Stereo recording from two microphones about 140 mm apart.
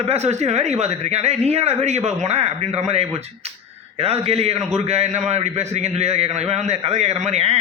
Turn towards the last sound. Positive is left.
turn(degrees=-50)  # may be behind; listen again after turning